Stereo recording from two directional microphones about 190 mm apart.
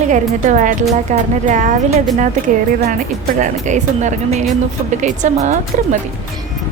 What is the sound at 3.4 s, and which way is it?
A woman's voice, 40° right (ahead or behind).